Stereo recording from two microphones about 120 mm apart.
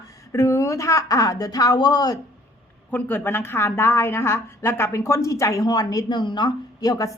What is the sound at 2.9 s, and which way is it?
A woman's voice, 15° left (ahead or behind).